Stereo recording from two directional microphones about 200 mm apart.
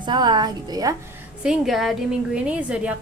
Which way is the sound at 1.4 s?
Centre (ahead or behind).